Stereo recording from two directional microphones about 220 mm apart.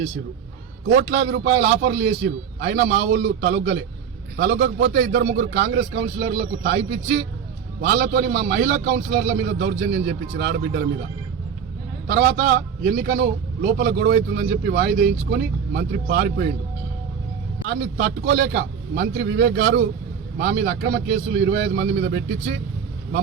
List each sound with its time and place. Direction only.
0.9 s a man's voice: 50° right (ahead or behind)
12.0 s a man's voice: 45° right (ahead or behind)
17.7 s a man's voice: 50° right (ahead or behind)